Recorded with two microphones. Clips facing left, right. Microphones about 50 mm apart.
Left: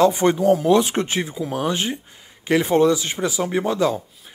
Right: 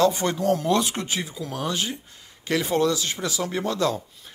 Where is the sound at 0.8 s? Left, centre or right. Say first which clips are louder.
Left 6 dB; left.